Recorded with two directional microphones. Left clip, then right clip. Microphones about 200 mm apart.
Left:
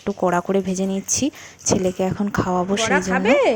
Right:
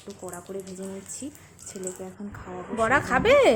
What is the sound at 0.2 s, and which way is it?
A woman's voice, 45° left (ahead or behind).